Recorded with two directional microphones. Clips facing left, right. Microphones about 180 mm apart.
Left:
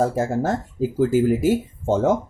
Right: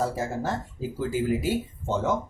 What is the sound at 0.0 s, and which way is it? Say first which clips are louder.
Speech: left 7 dB; 45° left (ahead or behind).